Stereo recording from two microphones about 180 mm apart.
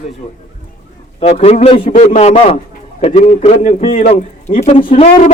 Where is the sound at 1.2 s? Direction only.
35° left (ahead or behind).